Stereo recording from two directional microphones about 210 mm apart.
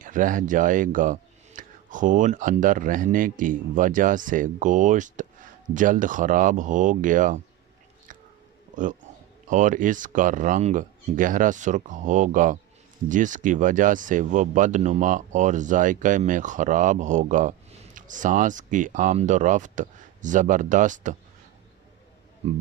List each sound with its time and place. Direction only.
0.0 s speech: 40° right (ahead or behind)
8.7 s a man's voice: 40° right (ahead or behind)
22.4 s speech: 30° right (ahead or behind)